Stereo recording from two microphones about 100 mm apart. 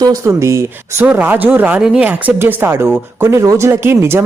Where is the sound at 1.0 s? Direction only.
15° right (ahead or behind).